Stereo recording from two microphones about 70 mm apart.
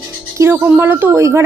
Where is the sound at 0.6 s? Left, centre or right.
Right.